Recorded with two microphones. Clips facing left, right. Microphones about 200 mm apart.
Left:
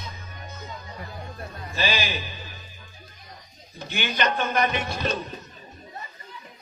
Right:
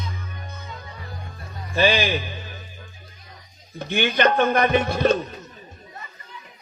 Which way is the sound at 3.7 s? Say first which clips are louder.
Right 7 dB; 55° right (ahead or behind).